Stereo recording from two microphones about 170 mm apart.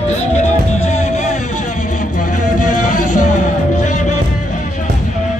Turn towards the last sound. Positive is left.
turn(degrees=45)  # may be behind; listen again after turning